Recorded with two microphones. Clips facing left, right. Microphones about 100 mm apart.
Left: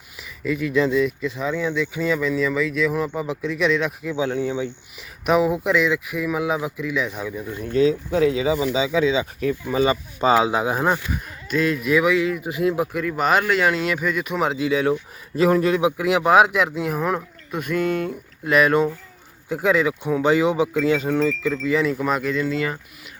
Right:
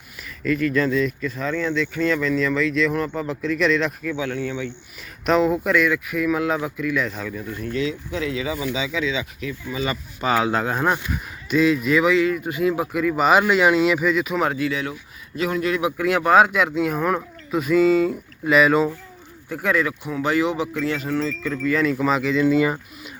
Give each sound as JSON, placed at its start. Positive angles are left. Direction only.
{"t": 0.2, "sound": "speech", "side_deg": 10}
{"t": 4.0, "sound": "speech", "side_deg": 20}
{"t": 7.8, "sound": "speech", "side_deg": 35}
{"t": 9.8, "sound": "speech", "side_deg": 25}
{"t": 10.5, "sound": "speech", "side_deg": 10}
{"t": 11.1, "sound": "speech", "side_deg": 0}
{"t": 13.4, "sound": "speech", "side_deg": -15}
{"t": 14.1, "sound": "speech", "side_deg": 0}
{"t": 14.5, "sound": "speech", "side_deg": 20}
{"t": 15.4, "sound": "speech", "side_deg": 35}
{"t": 15.8, "sound": "speech", "side_deg": 15}
{"t": 19.5, "sound": "speech", "side_deg": 20}
{"t": 21.9, "sound": "speech", "side_deg": 0}
{"t": 22.4, "sound": "speech", "side_deg": -15}